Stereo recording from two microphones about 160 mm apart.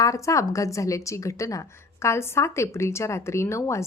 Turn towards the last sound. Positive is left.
turn(degrees=20)  # may be behind; listen again after turning